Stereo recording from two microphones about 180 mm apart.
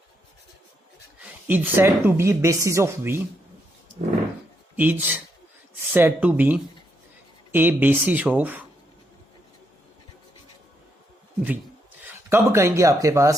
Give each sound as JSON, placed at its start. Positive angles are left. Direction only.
{"t": 1.5, "sound": "speech", "side_deg": -10}
{"t": 4.8, "sound": "speech", "side_deg": -10}
{"t": 12.0, "sound": "speech", "side_deg": -15}